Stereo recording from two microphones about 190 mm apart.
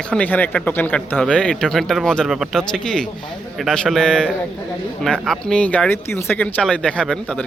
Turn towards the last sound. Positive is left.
turn(degrees=5)  # may be behind; listen again after turning